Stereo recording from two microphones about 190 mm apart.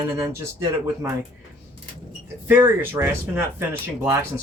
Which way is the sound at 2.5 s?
10° right (ahead or behind).